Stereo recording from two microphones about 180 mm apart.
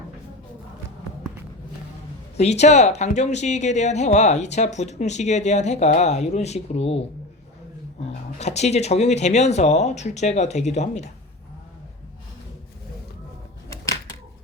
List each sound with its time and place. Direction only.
2.4 s speech: 40° left (ahead or behind)
8.4 s speech: 40° left (ahead or behind)